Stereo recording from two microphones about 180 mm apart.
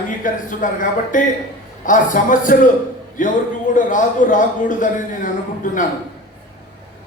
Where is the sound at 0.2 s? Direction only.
45° left (ahead or behind).